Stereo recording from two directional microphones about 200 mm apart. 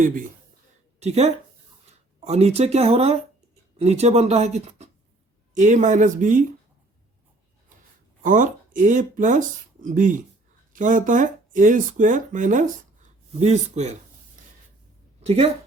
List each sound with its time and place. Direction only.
0.9 s a woman's voice: 35° right (ahead or behind)
8.2 s speech: 40° right (ahead or behind)
15.2 s speech: 30° right (ahead or behind)